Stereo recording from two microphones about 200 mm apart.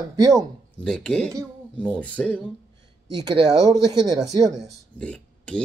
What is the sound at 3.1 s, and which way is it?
Speech, 25° right (ahead or behind).